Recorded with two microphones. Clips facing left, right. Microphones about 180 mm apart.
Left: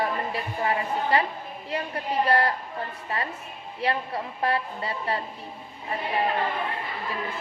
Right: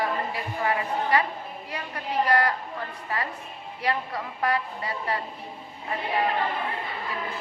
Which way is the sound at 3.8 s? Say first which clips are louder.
Left 1 dB; 25° left (ahead or behind).